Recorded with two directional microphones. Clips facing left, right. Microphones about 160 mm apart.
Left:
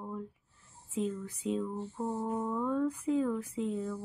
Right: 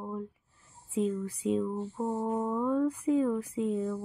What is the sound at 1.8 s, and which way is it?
Speech, 10° right (ahead or behind).